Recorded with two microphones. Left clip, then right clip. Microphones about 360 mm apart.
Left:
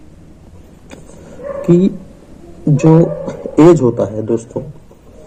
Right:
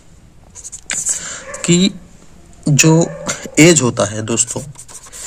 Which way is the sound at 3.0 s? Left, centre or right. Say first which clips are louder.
Left 3 dB; right.